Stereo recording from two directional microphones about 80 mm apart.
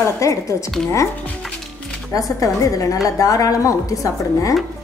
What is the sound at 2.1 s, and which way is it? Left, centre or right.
A woman's voice, left.